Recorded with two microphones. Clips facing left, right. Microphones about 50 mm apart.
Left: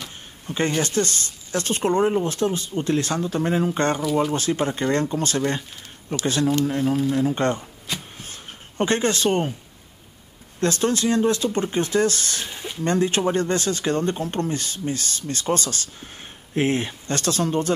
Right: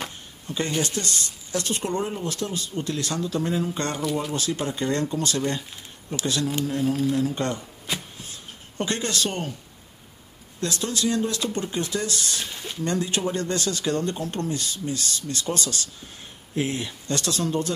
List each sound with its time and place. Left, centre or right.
0.5 s speech: left
4.0 s speech: centre
4.3 s speech: left
8.2 s a sound: left
10.6 s speech: left
12.4 s a sound: centre
12.8 s speech: left